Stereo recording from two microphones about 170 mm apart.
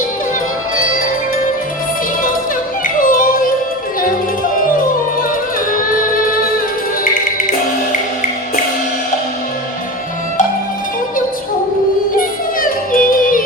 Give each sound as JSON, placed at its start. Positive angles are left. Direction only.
{"t": 2.8, "sound": "yodeling", "side_deg": 55}
{"t": 5.5, "sound": "music", "side_deg": 55}
{"t": 12.1, "sound": "music", "side_deg": 55}